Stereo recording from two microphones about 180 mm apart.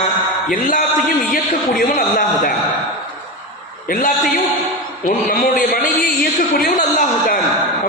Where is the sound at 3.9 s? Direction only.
50° left (ahead or behind).